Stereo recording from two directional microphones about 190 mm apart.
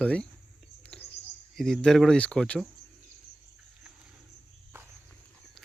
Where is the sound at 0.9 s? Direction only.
5° left (ahead or behind).